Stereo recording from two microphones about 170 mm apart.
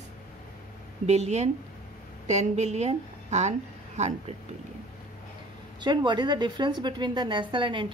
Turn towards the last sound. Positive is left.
turn(degrees=-30)  # may be behind; listen again after turning